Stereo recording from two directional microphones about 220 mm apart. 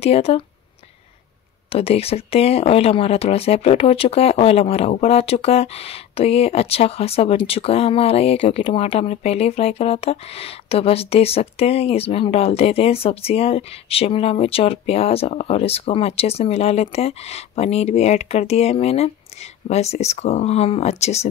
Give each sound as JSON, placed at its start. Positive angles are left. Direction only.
{"t": 0.0, "sound": "speech", "side_deg": 25}
{"t": 1.7, "sound": "speech", "side_deg": 25}